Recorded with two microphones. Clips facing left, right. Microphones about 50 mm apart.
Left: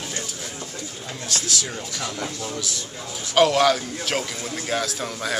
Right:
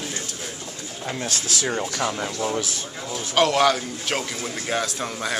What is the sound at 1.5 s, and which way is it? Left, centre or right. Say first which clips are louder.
Speech: right 5 dB; right.